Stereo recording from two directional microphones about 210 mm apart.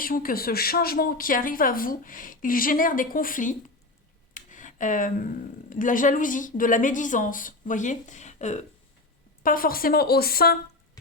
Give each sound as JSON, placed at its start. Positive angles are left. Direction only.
{"t": 0.0, "sound": "a woman's voice", "side_deg": 40}